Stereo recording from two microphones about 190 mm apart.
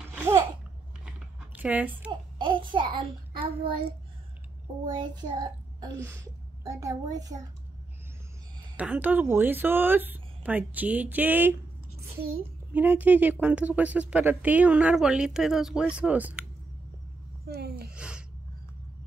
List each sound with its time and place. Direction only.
1.0 s a sound: 10° right (ahead or behind)
2.3 s a child's voice: 25° right (ahead or behind)
4.8 s a child's voice: 25° right (ahead or behind)
8.7 s a woman's voice: 10° right (ahead or behind)
12.7 s a woman's voice: 10° right (ahead or behind)
17.5 s speech: 55° right (ahead or behind)
17.9 s speech: 5° right (ahead or behind)